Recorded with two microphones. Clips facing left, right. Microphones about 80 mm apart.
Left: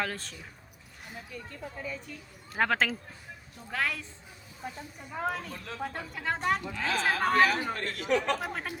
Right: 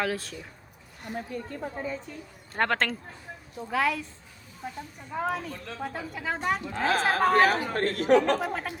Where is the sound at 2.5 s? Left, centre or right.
Centre.